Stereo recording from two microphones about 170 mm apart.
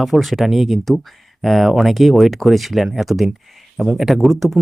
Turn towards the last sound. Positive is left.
turn(degrees=0)  # may be behind; listen again after turning